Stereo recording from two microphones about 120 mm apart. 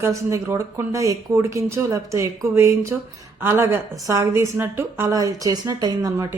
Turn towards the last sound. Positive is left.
turn(degrees=-35)  # may be behind; listen again after turning